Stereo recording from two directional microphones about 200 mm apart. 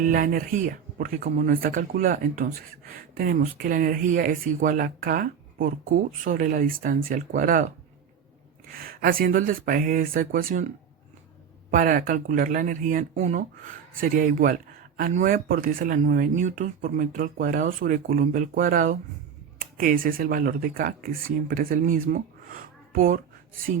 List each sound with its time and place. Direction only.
0.0 s speech: 45° right (ahead or behind)
8.7 s speech: 45° right (ahead or behind)
11.7 s speech: 45° right (ahead or behind)